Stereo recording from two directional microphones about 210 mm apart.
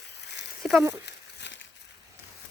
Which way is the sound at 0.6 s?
Centre (ahead or behind).